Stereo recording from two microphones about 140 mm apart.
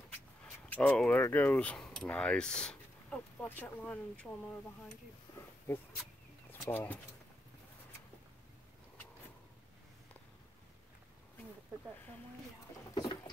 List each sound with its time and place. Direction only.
0.7 s speech: 10° left (ahead or behind)
6.7 s speech: 15° left (ahead or behind)
12.9 s a sound: 25° left (ahead or behind)